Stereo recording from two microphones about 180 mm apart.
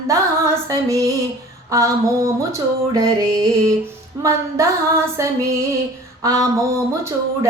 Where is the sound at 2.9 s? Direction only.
20° right (ahead or behind).